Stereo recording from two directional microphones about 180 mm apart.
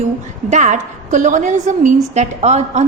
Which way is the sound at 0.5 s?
45° right (ahead or behind).